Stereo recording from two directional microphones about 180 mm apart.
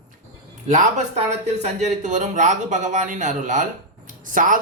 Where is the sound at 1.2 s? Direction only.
40° right (ahead or behind).